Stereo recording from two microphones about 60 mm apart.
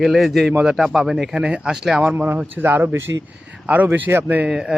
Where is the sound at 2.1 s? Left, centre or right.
Right.